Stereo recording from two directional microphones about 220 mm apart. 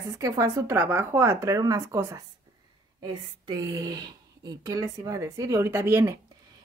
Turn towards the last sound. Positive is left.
turn(degrees=-10)  # may be behind; listen again after turning